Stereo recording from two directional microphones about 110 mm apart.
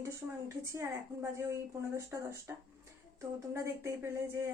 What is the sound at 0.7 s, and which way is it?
A woman's voice, 25° right (ahead or behind).